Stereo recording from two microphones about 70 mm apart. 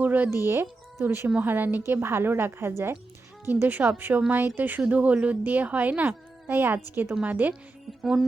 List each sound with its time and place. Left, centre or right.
0.0 s music: right
0.3 s a woman's voice: right
6.5 s a woman's voice: right
7.1 s a woman's voice: right
8.0 s music: centre